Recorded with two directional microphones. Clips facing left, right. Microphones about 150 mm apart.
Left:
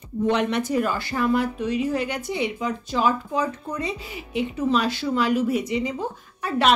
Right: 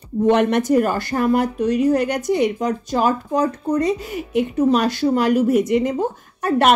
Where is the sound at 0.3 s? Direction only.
50° right (ahead or behind).